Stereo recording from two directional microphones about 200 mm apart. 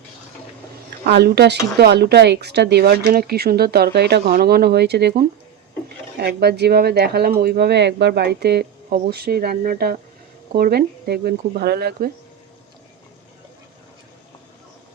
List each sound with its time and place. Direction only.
1.0 s speech: 55° right (ahead or behind)